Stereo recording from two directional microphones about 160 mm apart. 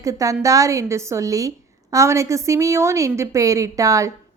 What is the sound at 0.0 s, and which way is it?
A woman's voice, 20° right (ahead or behind).